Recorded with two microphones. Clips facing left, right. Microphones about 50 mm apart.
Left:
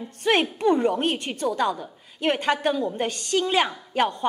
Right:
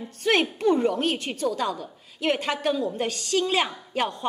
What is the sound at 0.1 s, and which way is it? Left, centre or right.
A woman's voice, left.